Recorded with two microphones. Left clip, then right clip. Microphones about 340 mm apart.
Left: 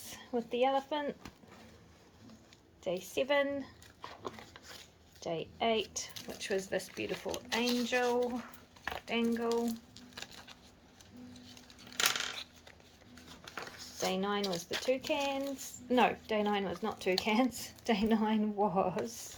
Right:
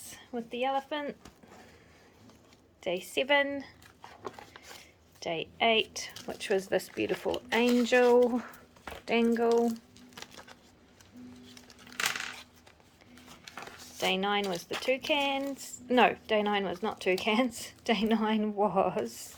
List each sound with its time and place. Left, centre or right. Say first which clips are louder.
0.1 s speech: left 2 dB; centre
2.8 s a woman's voice: right 3 dB; centre
4.2 s a sound: right 5 dB; centre
5.2 s speech: right 5 dB; centre
14.0 s speech: right 5 dB; centre